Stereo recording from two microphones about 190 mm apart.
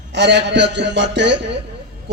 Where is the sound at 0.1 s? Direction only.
65° right (ahead or behind).